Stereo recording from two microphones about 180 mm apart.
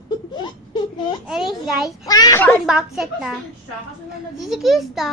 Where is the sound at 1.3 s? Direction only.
Centre (ahead or behind).